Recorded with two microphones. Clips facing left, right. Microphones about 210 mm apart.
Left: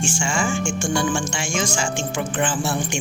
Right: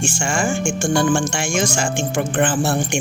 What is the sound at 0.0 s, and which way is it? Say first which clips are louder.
Speech: right 2 dB; 60° right (ahead or behind).